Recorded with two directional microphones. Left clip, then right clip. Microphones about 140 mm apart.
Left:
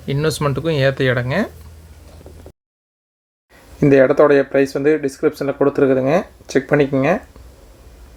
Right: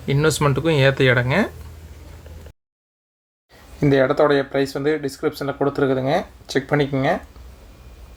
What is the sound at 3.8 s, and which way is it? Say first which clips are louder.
Speech: left 5 dB; 35° left (ahead or behind).